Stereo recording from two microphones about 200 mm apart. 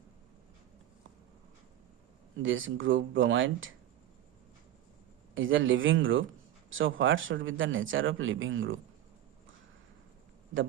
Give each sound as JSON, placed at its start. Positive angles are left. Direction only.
{"t": 2.4, "sound": "speech", "side_deg": -75}
{"t": 5.3, "sound": "speech", "side_deg": -75}